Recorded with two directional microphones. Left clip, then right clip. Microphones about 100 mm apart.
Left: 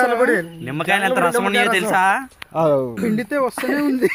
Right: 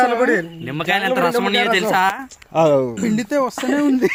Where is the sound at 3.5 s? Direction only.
5° right (ahead or behind).